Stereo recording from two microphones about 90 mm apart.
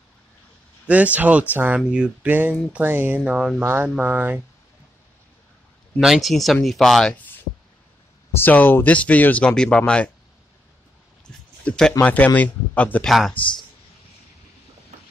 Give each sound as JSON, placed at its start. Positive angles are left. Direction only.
{"t": 0.8, "sound": "speech", "side_deg": -15}
{"t": 2.7, "sound": "speech", "side_deg": -20}
{"t": 3.6, "sound": "speech", "side_deg": -25}
{"t": 5.9, "sound": "speech", "side_deg": -5}
{"t": 8.3, "sound": "speech", "side_deg": 20}
{"t": 11.2, "sound": "a sound", "side_deg": 10}
{"t": 12.0, "sound": "speech", "side_deg": 15}
{"t": 13.0, "sound": "speech", "side_deg": 0}